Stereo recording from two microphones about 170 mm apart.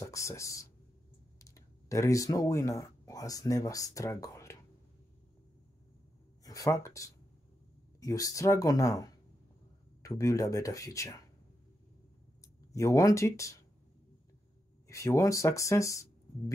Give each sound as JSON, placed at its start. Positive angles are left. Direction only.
{"t": 0.0, "sound": "speech", "side_deg": 15}
{"t": 6.4, "sound": "speech", "side_deg": 20}
{"t": 10.0, "sound": "speech", "side_deg": 20}
{"t": 12.7, "sound": "speech", "side_deg": 20}
{"t": 14.9, "sound": "speech", "side_deg": 20}